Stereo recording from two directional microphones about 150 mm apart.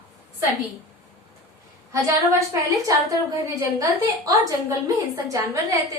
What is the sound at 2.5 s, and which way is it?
A woman's voice, 20° right (ahead or behind).